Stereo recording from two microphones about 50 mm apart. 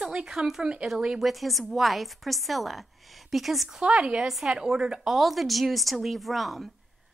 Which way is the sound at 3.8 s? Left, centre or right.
Centre.